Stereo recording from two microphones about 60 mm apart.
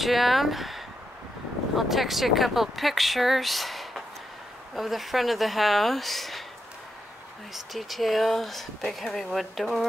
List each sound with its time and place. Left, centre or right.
0.0 s speech: centre
7.5 s speech: centre